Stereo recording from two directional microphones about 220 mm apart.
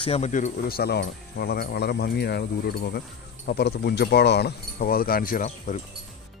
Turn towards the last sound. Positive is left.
turn(degrees=35)  # may be behind; listen again after turning